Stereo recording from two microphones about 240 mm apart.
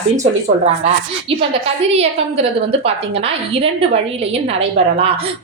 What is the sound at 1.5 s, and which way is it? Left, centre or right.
A woman's voice, right.